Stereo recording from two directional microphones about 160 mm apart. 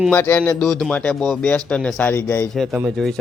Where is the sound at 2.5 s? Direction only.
Centre (ahead or behind).